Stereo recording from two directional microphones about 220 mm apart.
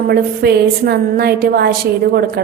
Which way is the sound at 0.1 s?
45° right (ahead or behind).